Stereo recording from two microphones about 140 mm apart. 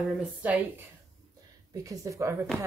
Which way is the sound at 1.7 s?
25° right (ahead or behind).